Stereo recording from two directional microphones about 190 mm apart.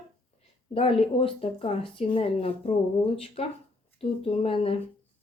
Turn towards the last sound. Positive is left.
turn(degrees=30)  # may be behind; listen again after turning